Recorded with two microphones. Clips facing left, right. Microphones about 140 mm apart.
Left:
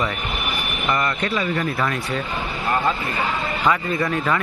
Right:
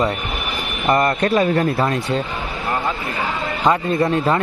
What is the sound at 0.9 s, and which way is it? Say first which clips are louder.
Speech: right 7 dB; 40° right (ahead or behind).